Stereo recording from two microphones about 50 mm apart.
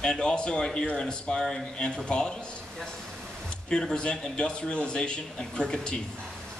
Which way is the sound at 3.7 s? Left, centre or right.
Centre.